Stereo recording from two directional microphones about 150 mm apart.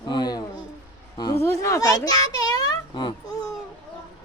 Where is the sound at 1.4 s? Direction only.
20° left (ahead or behind).